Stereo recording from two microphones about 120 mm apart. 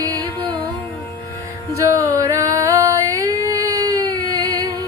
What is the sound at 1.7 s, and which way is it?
Music, 25° right (ahead or behind).